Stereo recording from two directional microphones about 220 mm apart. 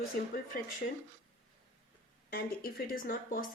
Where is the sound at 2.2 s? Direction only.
45° left (ahead or behind).